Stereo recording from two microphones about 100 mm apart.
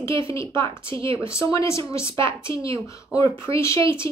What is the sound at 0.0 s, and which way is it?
Speech, 30° left (ahead or behind).